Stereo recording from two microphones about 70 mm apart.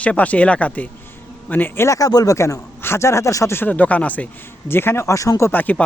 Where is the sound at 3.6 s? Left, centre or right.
Left.